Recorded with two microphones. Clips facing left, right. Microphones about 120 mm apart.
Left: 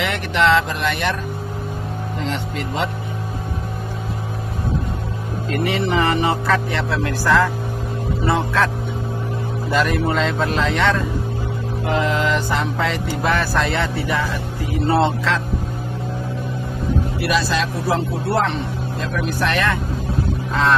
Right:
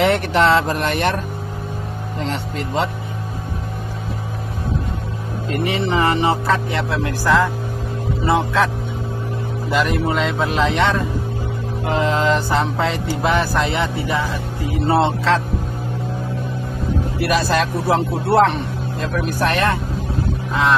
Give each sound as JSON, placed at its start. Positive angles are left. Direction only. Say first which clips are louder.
{"t": 0.0, "sound": "speech", "louder": "right 3 dB", "side_deg": -35}
{"t": 2.2, "sound": "speech", "louder": "right 1 dB", "side_deg": -40}
{"t": 5.5, "sound": "music", "louder": "even", "side_deg": -25}
{"t": 9.7, "sound": "speech", "louder": "even", "side_deg": -15}
{"t": 11.8, "sound": "music", "louder": "right 2 dB", "side_deg": -30}
{"t": 14.9, "sound": "speech", "louder": "right 2 dB", "side_deg": -30}
{"t": 17.3, "sound": "speech", "louder": "right 3 dB", "side_deg": -50}